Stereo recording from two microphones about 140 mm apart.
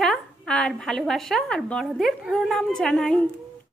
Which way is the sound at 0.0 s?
5° left (ahead or behind).